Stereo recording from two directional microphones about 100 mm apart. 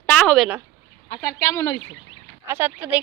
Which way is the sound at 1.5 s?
30° left (ahead or behind).